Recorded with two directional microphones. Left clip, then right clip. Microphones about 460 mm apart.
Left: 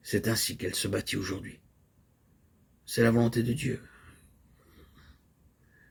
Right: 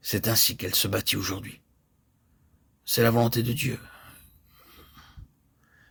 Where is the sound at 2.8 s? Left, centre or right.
Right.